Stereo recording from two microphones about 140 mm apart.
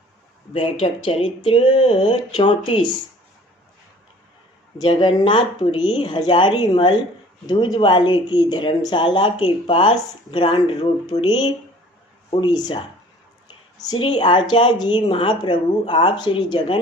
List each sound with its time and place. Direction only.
0.5 s speech: 40° left (ahead or behind)
4.8 s speech: 35° left (ahead or behind)
13.9 s speech: 40° left (ahead or behind)